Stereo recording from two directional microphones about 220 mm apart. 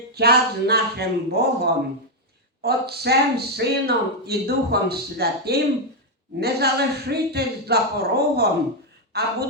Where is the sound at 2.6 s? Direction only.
45° right (ahead or behind).